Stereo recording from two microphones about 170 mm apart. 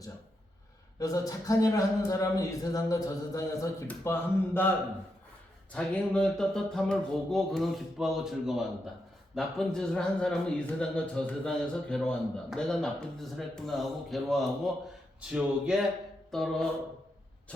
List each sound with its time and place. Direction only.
0.9 s speech: 20° left (ahead or behind)
5.7 s a man's voice: 5° left (ahead or behind)